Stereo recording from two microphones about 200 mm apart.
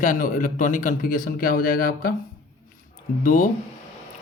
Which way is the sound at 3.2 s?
45° left (ahead or behind).